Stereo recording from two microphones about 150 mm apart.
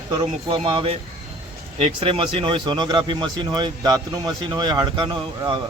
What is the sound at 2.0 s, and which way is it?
A man's voice, 35° right (ahead or behind).